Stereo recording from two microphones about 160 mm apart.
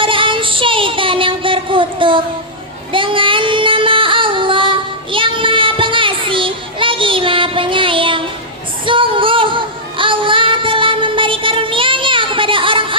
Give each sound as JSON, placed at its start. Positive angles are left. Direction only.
{"t": 0.0, "sound": "child singing", "side_deg": -30}
{"t": 2.9, "sound": "music", "side_deg": -30}